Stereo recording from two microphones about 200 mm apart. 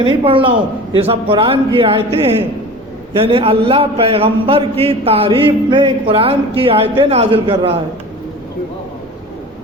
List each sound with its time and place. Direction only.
0.0 s a man's voice: 25° right (ahead or behind)